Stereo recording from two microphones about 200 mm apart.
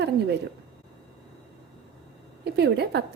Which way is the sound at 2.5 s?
55° right (ahead or behind).